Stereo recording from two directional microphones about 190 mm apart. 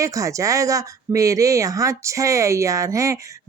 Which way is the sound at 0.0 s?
15° right (ahead or behind).